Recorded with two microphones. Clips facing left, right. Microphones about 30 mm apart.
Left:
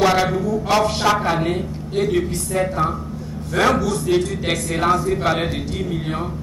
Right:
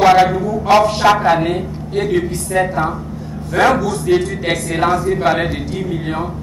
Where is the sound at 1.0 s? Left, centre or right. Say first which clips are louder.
Right 6 dB; right.